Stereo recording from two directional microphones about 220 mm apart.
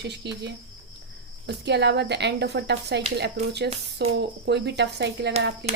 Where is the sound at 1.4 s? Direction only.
50° right (ahead or behind).